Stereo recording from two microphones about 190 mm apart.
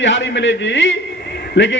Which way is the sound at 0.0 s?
70° left (ahead or behind).